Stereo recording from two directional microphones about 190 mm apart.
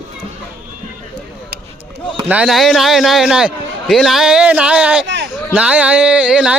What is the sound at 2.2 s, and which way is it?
A man's voice, 5° right (ahead or behind).